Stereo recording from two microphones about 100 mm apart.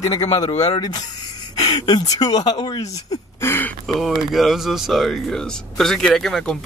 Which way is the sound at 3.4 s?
25° left (ahead or behind).